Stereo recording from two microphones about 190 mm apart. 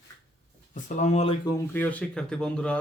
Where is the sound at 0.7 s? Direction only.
40° left (ahead or behind).